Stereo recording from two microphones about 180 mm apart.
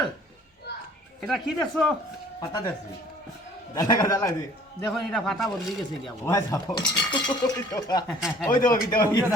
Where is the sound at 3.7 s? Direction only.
20° left (ahead or behind).